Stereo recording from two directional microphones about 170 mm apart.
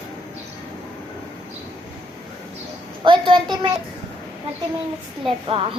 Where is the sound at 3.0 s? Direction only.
30° right (ahead or behind).